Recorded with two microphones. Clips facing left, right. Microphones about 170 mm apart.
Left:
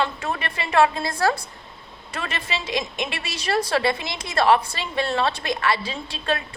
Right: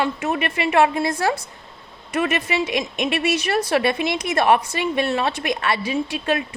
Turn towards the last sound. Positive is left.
turn(degrees=-15)  # may be behind; listen again after turning